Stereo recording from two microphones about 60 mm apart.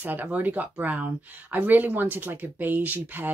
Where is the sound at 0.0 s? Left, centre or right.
Right.